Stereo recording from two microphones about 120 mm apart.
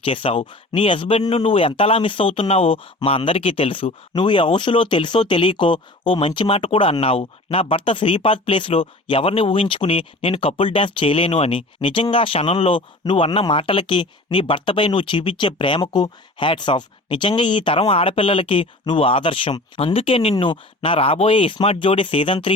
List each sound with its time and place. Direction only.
0.0 s speech: 50° left (ahead or behind)